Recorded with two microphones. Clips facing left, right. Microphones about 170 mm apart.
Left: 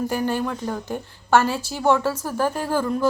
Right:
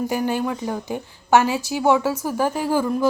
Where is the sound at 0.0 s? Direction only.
10° right (ahead or behind).